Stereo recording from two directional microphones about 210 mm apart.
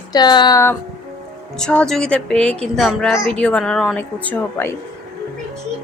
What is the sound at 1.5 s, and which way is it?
A woman's voice, 5° left (ahead or behind).